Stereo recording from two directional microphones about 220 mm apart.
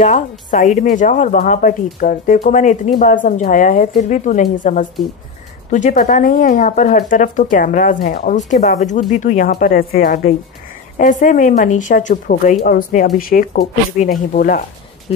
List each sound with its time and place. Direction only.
0.0 s speech: 35° left (ahead or behind)
15.1 s speech: 25° left (ahead or behind)